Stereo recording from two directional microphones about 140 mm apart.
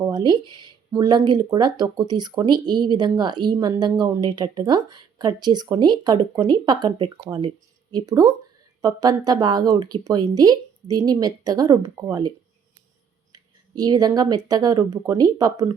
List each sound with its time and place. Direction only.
0.0 s speech: 30° right (ahead or behind)
13.3 s speech: 25° right (ahead or behind)